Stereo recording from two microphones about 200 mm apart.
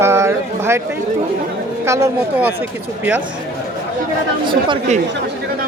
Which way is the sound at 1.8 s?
15° right (ahead or behind).